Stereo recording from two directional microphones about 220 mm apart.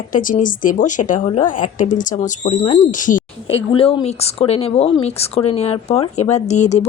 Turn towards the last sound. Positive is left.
turn(degrees=30)  # may be behind; listen again after turning